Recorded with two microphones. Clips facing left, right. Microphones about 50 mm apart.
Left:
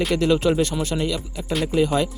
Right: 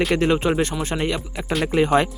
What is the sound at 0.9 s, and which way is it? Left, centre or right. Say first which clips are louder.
Speech: right 2 dB; right.